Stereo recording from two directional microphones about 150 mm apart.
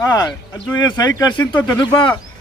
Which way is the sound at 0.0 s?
25° left (ahead or behind).